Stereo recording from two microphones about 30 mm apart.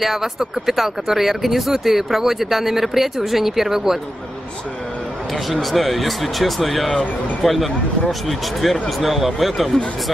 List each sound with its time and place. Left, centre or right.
0.0 s speech: centre
5.5 s speech: centre